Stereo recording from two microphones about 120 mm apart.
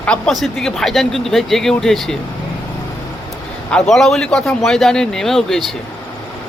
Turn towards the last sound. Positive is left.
turn(degrees=0)  # may be behind; listen again after turning